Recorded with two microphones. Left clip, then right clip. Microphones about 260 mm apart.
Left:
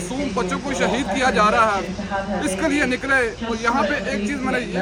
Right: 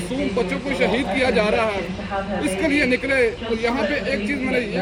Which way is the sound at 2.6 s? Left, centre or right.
Left.